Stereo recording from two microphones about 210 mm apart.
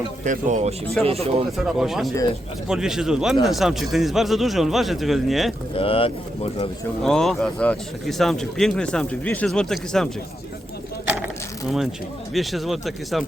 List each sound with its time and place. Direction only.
0.3 s speech: 35° right (ahead or behind)
1.5 s speech: centre (ahead or behind)
5.7 s speech: 25° left (ahead or behind)
7.0 s speech: centre (ahead or behind)
12.3 s speech: centre (ahead or behind)